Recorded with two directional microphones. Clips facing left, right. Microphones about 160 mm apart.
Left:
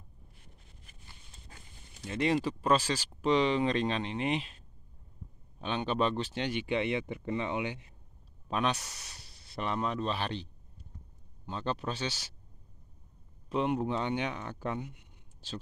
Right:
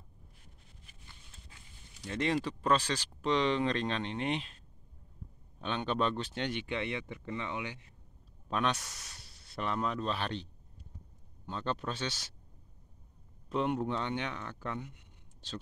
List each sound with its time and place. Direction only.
1.5 s a sound: 45° left (ahead or behind)
2.0 s speech: 10° left (ahead or behind)
6.7 s speech: 20° left (ahead or behind)
8.5 s speech: 5° left (ahead or behind)
13.5 s speech: 5° left (ahead or behind)